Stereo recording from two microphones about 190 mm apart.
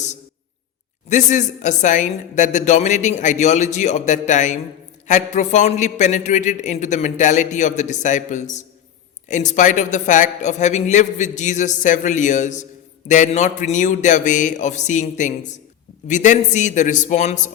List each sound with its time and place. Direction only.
1.0 s a woman's voice: 40° left (ahead or behind)